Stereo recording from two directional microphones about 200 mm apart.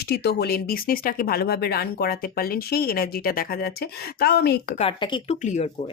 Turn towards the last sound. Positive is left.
turn(degrees=35)  # may be behind; listen again after turning